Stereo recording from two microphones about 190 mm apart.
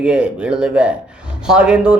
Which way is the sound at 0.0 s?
5° right (ahead or behind).